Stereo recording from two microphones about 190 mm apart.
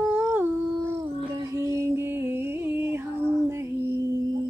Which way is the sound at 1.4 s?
15° right (ahead or behind).